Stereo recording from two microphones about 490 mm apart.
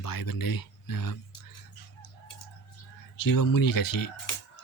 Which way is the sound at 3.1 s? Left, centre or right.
Left.